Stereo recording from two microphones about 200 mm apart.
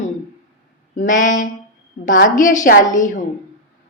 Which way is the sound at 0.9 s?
40° left (ahead or behind).